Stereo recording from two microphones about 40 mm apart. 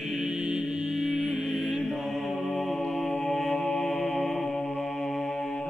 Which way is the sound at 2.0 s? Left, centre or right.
Centre.